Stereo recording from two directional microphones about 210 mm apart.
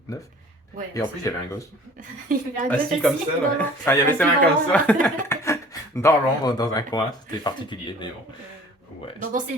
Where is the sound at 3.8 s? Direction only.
10° left (ahead or behind).